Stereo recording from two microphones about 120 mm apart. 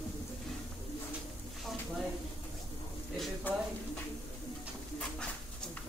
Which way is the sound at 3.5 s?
15° left (ahead or behind).